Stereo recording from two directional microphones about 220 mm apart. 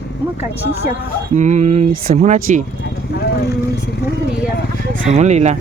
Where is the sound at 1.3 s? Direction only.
30° right (ahead or behind).